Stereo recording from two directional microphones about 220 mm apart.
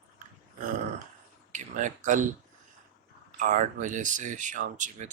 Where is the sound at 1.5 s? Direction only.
35° right (ahead or behind).